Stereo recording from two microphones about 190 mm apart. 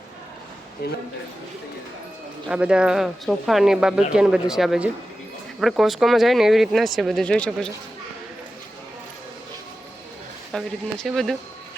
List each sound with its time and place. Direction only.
0.8 s a man's voice: 55° left (ahead or behind)
2.5 s speech: 5° right (ahead or behind)
10.5 s speech: centre (ahead or behind)